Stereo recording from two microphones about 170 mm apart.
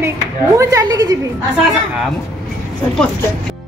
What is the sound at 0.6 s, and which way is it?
Speech, 20° right (ahead or behind).